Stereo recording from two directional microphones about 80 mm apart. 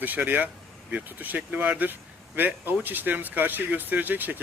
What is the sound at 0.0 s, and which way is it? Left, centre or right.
Speech, right.